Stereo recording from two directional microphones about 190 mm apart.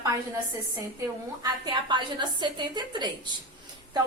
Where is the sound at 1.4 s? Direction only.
25° right (ahead or behind).